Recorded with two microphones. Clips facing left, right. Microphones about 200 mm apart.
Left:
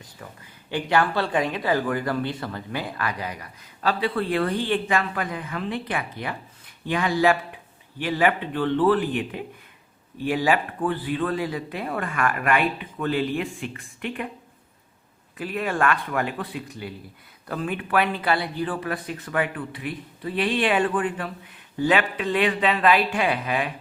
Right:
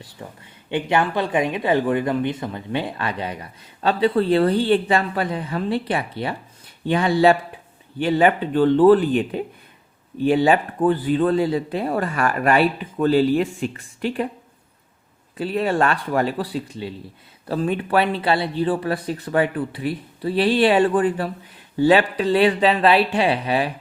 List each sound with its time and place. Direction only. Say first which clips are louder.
0.2 s speech: right 5 dB; 25° right (ahead or behind)
15.4 s speech: right 5 dB; 30° right (ahead or behind)